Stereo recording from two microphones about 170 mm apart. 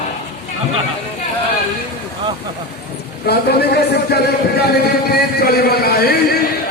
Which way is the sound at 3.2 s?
70° left (ahead or behind).